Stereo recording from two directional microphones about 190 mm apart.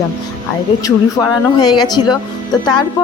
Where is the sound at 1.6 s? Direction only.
20° left (ahead or behind).